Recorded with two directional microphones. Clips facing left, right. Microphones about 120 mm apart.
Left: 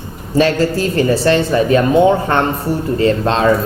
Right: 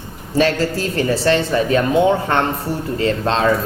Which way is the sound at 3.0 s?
40° left (ahead or behind).